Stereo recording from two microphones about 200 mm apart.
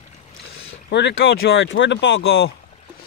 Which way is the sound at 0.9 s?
60° left (ahead or behind).